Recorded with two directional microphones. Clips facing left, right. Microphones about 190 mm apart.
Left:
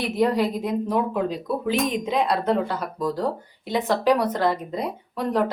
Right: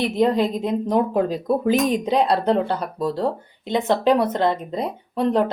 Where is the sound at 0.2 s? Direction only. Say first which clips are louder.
Right 1 dB; 25° right (ahead or behind).